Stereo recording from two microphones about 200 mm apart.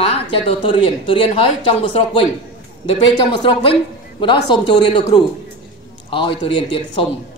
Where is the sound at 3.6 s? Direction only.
25° left (ahead or behind).